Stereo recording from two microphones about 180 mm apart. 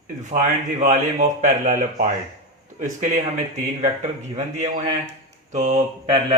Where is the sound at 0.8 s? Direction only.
45° right (ahead or behind).